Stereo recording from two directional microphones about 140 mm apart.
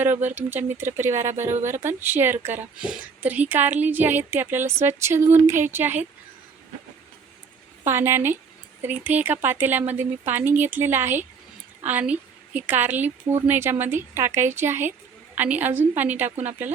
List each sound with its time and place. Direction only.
0.3 s a woman's voice: 15° right (ahead or behind)
7.9 s a woman's voice: 15° right (ahead or behind)